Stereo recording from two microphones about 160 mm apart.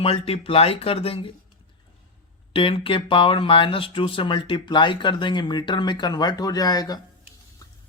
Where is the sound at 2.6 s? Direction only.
35° left (ahead or behind).